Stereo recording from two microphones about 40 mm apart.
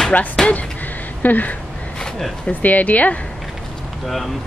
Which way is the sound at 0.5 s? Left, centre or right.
Left.